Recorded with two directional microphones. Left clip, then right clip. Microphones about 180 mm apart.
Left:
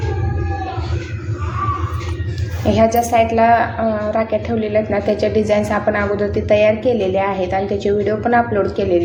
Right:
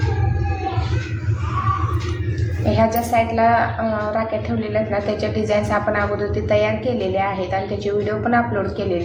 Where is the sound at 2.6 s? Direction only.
40° left (ahead or behind).